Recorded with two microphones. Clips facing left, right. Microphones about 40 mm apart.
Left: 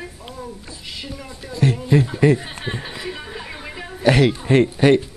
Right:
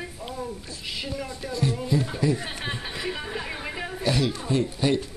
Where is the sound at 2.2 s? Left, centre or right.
Left.